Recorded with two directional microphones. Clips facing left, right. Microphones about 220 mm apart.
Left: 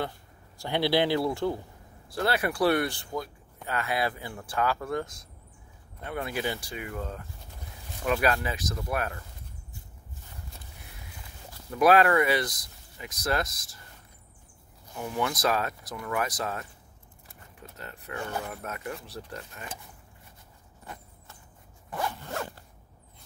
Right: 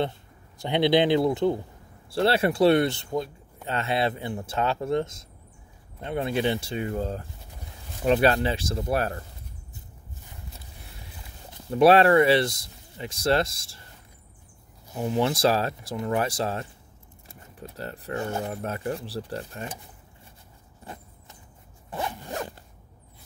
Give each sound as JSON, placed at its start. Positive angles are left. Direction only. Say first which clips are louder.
{"t": 0.6, "sound": "speech", "louder": "right 4 dB", "side_deg": -20}
{"t": 11.5, "sound": "speech", "louder": "right 4 dB", "side_deg": -30}
{"t": 15.0, "sound": "speech", "louder": "right 6 dB", "side_deg": -25}
{"t": 21.9, "sound": "zipper", "louder": "right 1 dB", "side_deg": -20}